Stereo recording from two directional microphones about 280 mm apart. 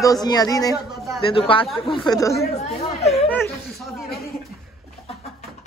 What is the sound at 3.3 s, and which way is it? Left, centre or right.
Speech, centre.